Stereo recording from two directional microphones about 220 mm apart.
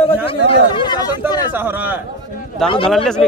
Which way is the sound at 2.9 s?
Centre (ahead or behind).